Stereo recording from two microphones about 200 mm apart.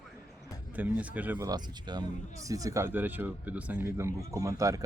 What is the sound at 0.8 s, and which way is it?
Speech, 5° right (ahead or behind).